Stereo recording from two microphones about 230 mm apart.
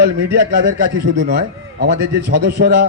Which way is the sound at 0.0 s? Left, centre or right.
Right.